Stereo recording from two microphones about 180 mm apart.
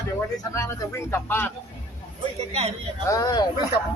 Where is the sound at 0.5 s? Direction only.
15° left (ahead or behind).